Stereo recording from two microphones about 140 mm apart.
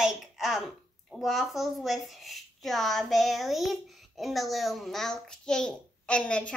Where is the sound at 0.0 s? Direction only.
Centre (ahead or behind).